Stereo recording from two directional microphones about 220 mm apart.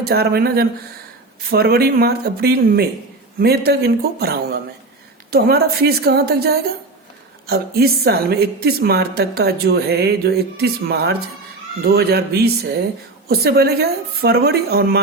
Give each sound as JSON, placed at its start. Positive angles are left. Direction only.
{"t": 0.0, "sound": "a woman's voice", "side_deg": -45}